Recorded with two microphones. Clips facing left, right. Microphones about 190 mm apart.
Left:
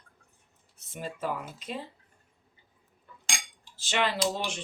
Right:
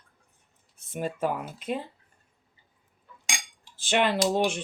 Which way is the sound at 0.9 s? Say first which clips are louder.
Right 5 dB; 55° right (ahead or behind).